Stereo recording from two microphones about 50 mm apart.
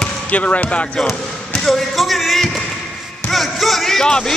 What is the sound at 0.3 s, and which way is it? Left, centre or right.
Speech, left.